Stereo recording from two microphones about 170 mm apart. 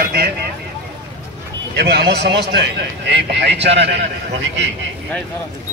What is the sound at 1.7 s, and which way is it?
A man's voice, 80° right.